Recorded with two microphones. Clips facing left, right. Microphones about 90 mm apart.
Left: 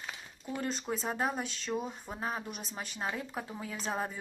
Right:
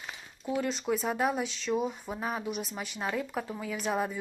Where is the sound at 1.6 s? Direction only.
5° right (ahead or behind).